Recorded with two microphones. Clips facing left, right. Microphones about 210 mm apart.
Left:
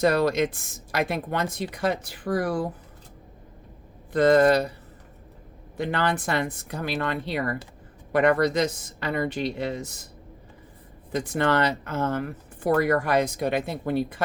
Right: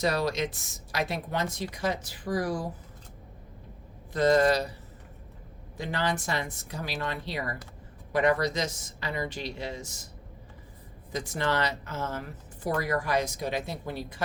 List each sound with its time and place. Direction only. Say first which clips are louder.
0.0 s speech: left 6 dB; 55° left (ahead or behind)
4.1 s speech: left 5 dB; 55° left (ahead or behind)
5.7 s speech: left 5 dB; 55° left (ahead or behind)
11.1 s speech: left 6 dB; 55° left (ahead or behind)